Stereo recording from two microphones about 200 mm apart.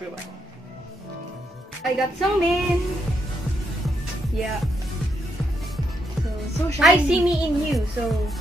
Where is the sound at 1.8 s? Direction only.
Centre (ahead or behind).